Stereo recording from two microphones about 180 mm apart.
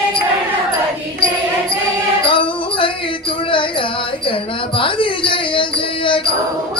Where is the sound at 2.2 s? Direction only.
30° left (ahead or behind).